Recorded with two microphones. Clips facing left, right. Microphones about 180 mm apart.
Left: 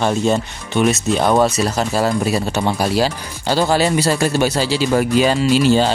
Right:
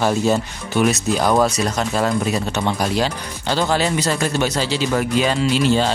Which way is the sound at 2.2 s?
5° left (ahead or behind).